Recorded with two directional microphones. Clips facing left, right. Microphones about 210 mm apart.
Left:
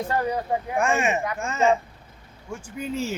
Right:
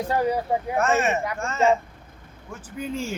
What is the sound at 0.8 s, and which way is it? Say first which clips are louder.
Speech: even; 15° left (ahead or behind).